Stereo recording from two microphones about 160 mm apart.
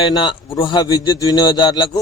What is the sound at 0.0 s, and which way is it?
A man's voice, 30° left (ahead or behind).